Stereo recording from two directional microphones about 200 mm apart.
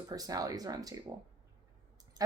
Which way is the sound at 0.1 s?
20° right (ahead or behind).